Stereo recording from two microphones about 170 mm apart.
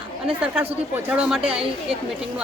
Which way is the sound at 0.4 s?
10° right (ahead or behind).